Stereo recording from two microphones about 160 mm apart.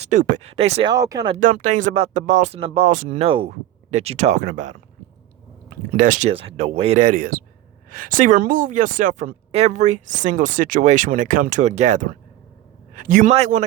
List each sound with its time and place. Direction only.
0.0 s speech: 50° right (ahead or behind)
0.9 s speech: 20° right (ahead or behind)
1.4 s speech: 50° right (ahead or behind)
2.6 s speech: 35° right (ahead or behind)
2.9 s speech: 55° right (ahead or behind)
3.2 s speech: 35° right (ahead or behind)
6.0 s speech: 50° right (ahead or behind)
6.3 s speech: 35° right (ahead or behind)
7.0 s speech: 60° right (ahead or behind)
9.5 s a man's voice: 40° right (ahead or behind); by 13.3 s 60° right (ahead or behind)
13.3 s speech: 45° right (ahead or behind)